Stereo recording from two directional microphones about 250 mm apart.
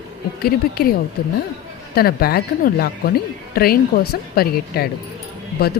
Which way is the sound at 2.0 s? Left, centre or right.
Left.